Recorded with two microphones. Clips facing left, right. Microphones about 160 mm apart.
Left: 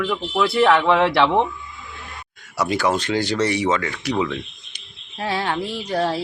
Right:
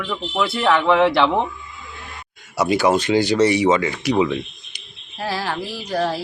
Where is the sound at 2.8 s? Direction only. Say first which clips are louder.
Right 5 dB; 10° right (ahead or behind).